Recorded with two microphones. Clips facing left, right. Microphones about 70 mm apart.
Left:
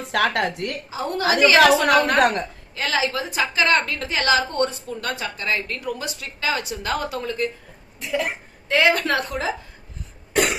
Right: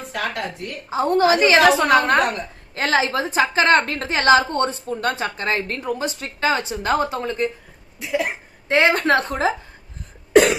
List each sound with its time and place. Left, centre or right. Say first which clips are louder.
0.1 s speech: left 6 dB; left
0.9 s a woman's voice: right 7 dB; right
7.9 s speech: right 2 dB; centre
8.7 s a woman's voice: right 2 dB; right